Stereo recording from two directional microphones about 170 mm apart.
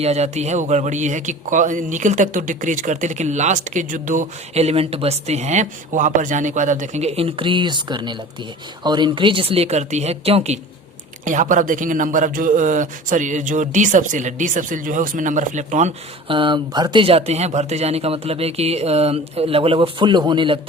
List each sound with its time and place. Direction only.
0.0 s speech: 40° right (ahead or behind)
11.3 s speech: 50° right (ahead or behind)
16.3 s speech: 30° right (ahead or behind)